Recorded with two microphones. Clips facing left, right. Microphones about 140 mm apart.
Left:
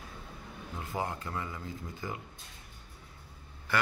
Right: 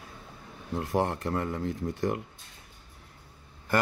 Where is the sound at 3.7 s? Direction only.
45° right (ahead or behind).